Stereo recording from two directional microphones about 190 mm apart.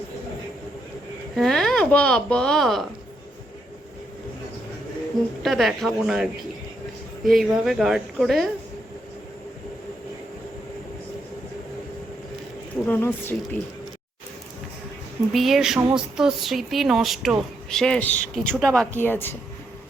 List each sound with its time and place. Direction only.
1.4 s speech: centre (ahead or behind)
5.4 s speech: centre (ahead or behind)
7.3 s speech: centre (ahead or behind)
12.8 s speech: 10° left (ahead or behind)
15.3 s speech: centre (ahead or behind)